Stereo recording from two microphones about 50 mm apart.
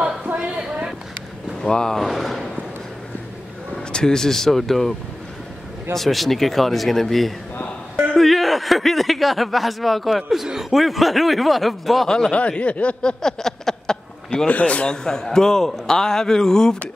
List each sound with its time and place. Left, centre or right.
0.6 s a sound: centre
1.6 s a man's voice: centre
2.0 s speech: centre
3.7 s speech: centre
5.9 s speech: centre
12.1 s a man's voice: centre
12.4 s speech: left
13.2 s a sound: centre
14.5 s a man's voice: left